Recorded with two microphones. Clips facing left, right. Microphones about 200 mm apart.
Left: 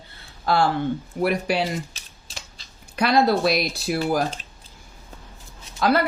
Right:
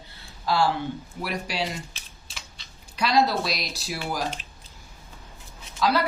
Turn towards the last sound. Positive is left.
turn(degrees=55)  # may be behind; listen again after turning